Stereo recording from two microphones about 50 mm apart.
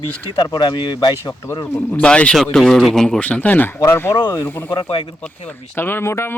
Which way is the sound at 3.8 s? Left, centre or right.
Left.